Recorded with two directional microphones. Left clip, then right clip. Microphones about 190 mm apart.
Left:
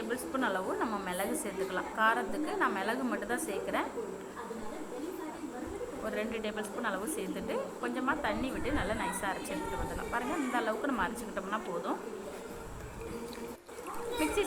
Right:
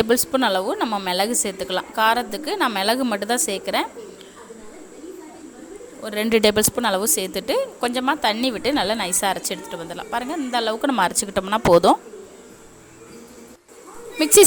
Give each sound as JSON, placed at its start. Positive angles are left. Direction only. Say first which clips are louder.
{"t": 0.1, "sound": "a woman's voice", "louder": "right 14 dB", "side_deg": -70}
{"t": 1.0, "sound": "a woman's voice", "louder": "right 13 dB", "side_deg": -70}
{"t": 6.1, "sound": "a woman's voice", "louder": "right 19 dB", "side_deg": -75}